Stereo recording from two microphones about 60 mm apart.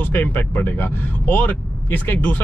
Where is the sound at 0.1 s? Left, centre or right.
Left.